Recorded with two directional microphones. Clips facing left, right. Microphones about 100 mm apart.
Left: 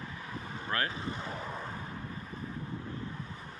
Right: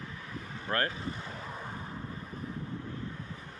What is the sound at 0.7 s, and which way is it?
Speech, 45° right (ahead or behind).